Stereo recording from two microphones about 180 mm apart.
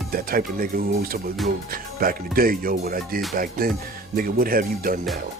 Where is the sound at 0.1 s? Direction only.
55° right (ahead or behind).